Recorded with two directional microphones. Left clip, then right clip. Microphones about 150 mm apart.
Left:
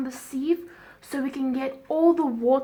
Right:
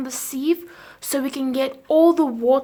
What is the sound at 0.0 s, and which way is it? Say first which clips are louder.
Speech: right 5 dB; 35° right (ahead or behind).